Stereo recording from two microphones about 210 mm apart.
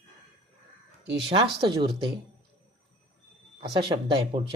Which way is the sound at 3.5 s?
25° right (ahead or behind).